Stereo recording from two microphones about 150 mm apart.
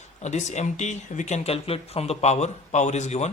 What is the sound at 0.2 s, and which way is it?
Speech, 50° left (ahead or behind).